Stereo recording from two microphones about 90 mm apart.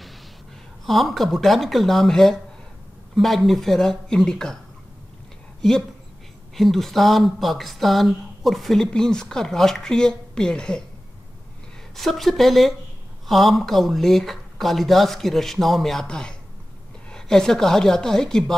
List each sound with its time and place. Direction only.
0.8 s speech: centre (ahead or behind)
5.6 s speech: 5° left (ahead or behind)
11.9 s speech: centre (ahead or behind)